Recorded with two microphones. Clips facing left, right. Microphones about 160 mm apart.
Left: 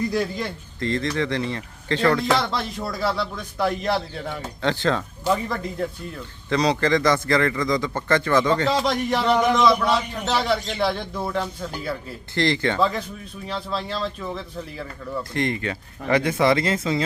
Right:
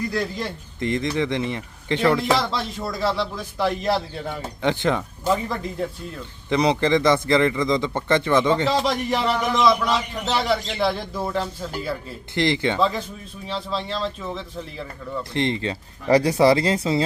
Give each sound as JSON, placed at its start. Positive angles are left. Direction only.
{"t": 0.1, "sound": "speech", "side_deg": 5}
{"t": 0.8, "sound": "speech", "side_deg": -20}
{"t": 2.3, "sound": "speech", "side_deg": 0}
{"t": 4.6, "sound": "speech", "side_deg": -20}
{"t": 5.2, "sound": "speech", "side_deg": 0}
{"t": 6.5, "sound": "a man's voice", "side_deg": -20}
{"t": 8.6, "sound": "speech", "side_deg": 0}
{"t": 12.3, "sound": "a man's voice", "side_deg": -20}
{"t": 12.8, "sound": "speech", "side_deg": 0}
{"t": 15.2, "sound": "speech", "side_deg": -25}